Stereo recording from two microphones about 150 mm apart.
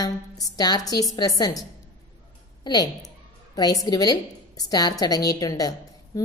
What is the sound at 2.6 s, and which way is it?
A woman's voice, 25° left (ahead or behind).